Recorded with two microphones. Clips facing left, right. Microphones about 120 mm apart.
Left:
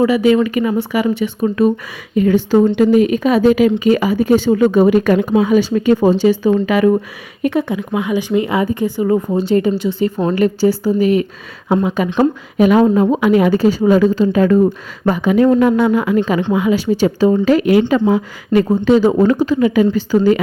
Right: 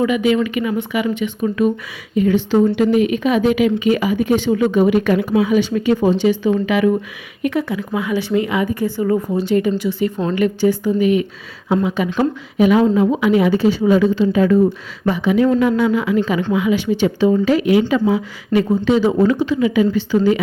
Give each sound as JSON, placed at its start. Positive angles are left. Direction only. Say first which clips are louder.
{"t": 0.0, "sound": "a woman's voice", "louder": "left 4 dB", "side_deg": 35}
{"t": 7.4, "sound": "speech", "louder": "left 3 dB", "side_deg": 25}
{"t": 11.7, "sound": "a woman's voice", "louder": "left 2 dB", "side_deg": 50}